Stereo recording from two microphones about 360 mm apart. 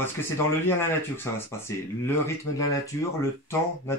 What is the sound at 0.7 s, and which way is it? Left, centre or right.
Speech, centre.